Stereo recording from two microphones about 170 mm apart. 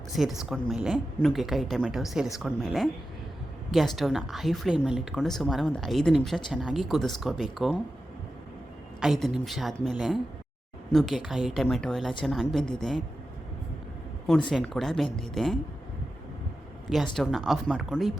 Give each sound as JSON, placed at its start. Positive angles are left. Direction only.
{"t": 0.1, "sound": "speech", "side_deg": 0}
{"t": 9.0, "sound": "speech", "side_deg": 0}
{"t": 14.3, "sound": "speech", "side_deg": 0}
{"t": 17.2, "sound": "speech", "side_deg": 0}